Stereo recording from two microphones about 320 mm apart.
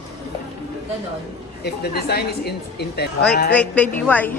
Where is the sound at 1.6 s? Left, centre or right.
Left.